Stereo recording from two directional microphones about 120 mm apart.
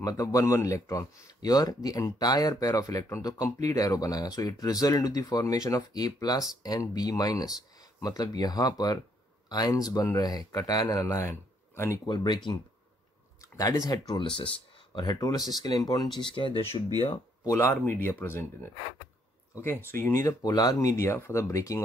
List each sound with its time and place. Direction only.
0.0 s speech: 30° left (ahead or behind)
12.1 s speech: 35° left (ahead or behind)
13.4 s speech: 30° left (ahead or behind)
16.2 s speech: 45° left (ahead or behind)
17.4 s speech: 25° left (ahead or behind)